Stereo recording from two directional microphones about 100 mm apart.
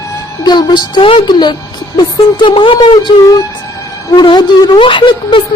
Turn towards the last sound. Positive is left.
turn(degrees=55)  # may be behind; listen again after turning